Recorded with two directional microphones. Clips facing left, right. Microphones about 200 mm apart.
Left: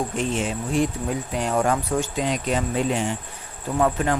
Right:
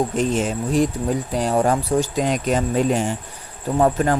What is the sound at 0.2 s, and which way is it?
Speech, 40° right (ahead or behind).